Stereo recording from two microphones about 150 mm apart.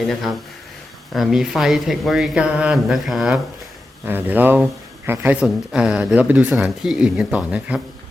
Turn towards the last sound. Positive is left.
turn(degrees=-10)  # may be behind; listen again after turning